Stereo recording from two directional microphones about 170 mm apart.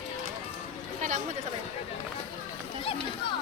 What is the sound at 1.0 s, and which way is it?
Chatter, 45° right (ahead or behind).